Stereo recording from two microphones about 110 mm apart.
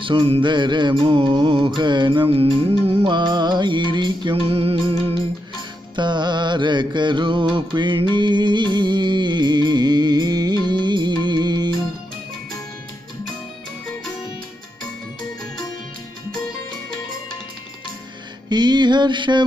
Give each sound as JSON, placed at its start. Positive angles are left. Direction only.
{"t": 0.0, "sound": "music", "side_deg": -55}
{"t": 3.0, "sound": "music", "side_deg": -45}
{"t": 5.9, "sound": "mantra", "side_deg": -45}
{"t": 18.5, "sound": "mantra", "side_deg": -40}